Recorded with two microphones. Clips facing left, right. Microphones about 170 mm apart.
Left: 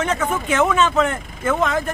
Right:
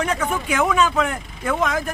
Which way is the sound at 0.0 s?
Centre (ahead or behind).